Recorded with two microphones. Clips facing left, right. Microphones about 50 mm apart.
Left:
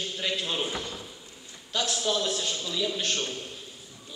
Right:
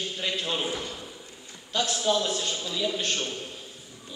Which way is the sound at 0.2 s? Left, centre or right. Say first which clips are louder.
Even; centre.